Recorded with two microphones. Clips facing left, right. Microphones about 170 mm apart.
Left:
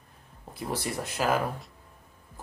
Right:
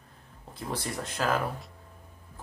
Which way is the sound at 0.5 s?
10° left (ahead or behind).